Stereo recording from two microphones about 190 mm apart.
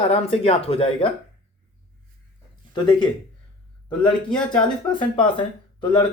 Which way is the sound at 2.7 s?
20° left (ahead or behind).